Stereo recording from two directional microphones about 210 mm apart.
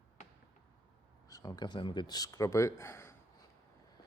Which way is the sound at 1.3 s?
15° left (ahead or behind).